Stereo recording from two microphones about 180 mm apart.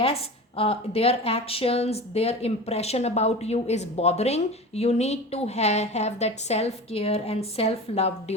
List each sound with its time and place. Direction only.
0.0 s a woman's voice: 30° left (ahead or behind)